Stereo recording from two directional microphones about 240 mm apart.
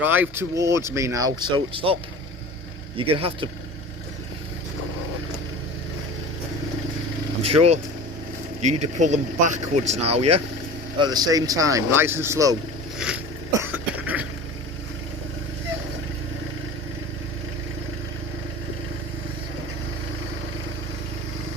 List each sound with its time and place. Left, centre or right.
0.0 s speech: centre
3.0 s speech: right
7.4 s speech: right
13.0 s throat clearing: centre
13.6 s cough: centre